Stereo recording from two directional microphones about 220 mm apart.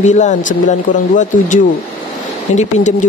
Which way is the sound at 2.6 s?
35° left (ahead or behind).